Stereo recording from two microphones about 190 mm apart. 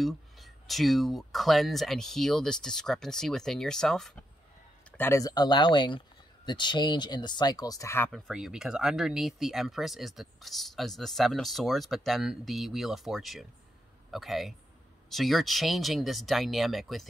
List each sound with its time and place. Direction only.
0.0 s speech: centre (ahead or behind)
4.9 s speech: 15° left (ahead or behind)
8.1 s speech: 5° right (ahead or behind)